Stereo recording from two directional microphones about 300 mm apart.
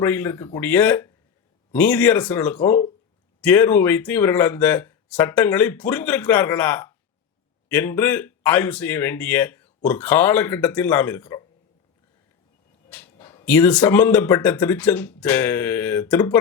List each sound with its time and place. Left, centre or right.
0.0 s speech: centre
12.9 s speech: centre